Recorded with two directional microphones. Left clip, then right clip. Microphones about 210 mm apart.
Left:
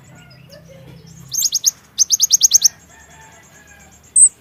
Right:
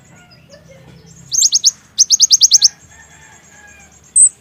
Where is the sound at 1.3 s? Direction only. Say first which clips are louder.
Right 5 dB; centre (ahead or behind).